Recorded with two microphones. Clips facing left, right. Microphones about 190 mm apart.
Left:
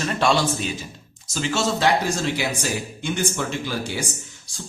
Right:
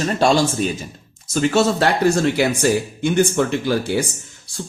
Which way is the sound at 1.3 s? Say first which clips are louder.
Right 7 dB; 55° right (ahead or behind).